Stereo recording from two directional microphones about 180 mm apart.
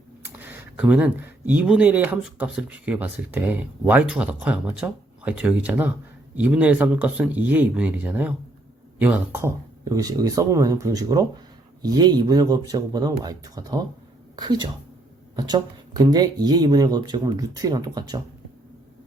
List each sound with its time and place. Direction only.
0.3 s speech: 10° right (ahead or behind)